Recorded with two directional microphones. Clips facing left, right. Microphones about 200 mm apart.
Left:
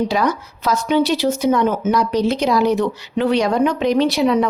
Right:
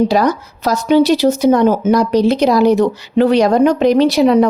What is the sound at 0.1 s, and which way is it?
Speech, 40° right (ahead or behind).